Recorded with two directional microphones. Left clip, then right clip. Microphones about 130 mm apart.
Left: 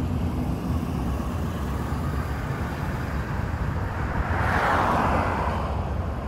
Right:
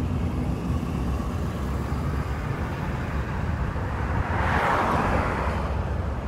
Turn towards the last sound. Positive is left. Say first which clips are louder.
# left 1 dB
turn(degrees=-15)  # may be behind; listen again after turning